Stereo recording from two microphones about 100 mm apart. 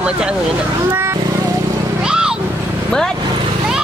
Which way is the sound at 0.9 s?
25° right (ahead or behind).